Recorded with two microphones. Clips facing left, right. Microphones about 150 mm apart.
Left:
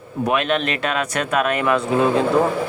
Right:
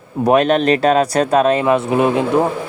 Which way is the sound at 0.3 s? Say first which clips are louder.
Right 8 dB; 40° right (ahead or behind).